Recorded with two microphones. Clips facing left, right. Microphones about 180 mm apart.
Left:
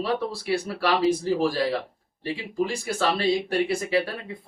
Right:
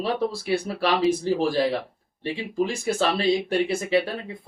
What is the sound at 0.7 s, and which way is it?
A man's voice, 25° right (ahead or behind).